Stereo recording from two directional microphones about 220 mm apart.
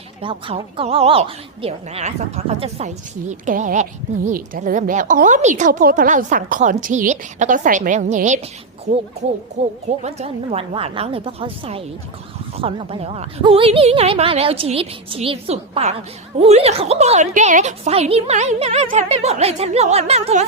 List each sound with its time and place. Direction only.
0.2 s a woman's voice: 25° right (ahead or behind)
9.6 s a woman's voice: 30° right (ahead or behind)